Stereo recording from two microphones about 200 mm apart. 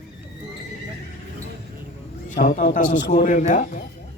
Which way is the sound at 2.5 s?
40° left (ahead or behind).